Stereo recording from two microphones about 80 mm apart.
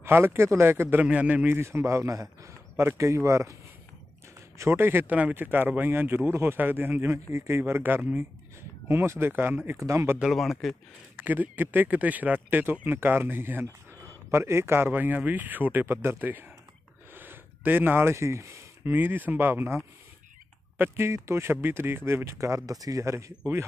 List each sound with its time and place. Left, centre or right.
0.0 s a man's voice: right
1.0 s speech: centre
1.6 s a man's voice: right
4.6 s a man's voice: right
8.8 s speech: right
9.7 s a man's voice: right
10.2 s speech: centre
11.1 s speech: right
17.1 s a sound: right
18.9 s a man's voice: right